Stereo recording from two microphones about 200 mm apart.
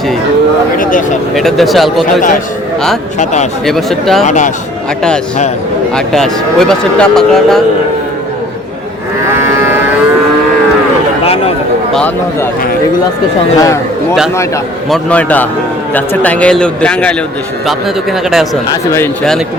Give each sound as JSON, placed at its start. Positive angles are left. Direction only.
{"t": 0.8, "sound": "speech", "side_deg": 40}
{"t": 1.4, "sound": "speech", "side_deg": 0}
{"t": 3.7, "sound": "speech", "side_deg": 0}
{"t": 4.2, "sound": "speech", "side_deg": 35}
{"t": 6.1, "sound": "speech", "side_deg": 0}
{"t": 11.9, "sound": "a man's voice", "side_deg": 10}
{"t": 13.6, "sound": "a man's voice", "side_deg": 15}
{"t": 14.8, "sound": "a man's voice", "side_deg": 5}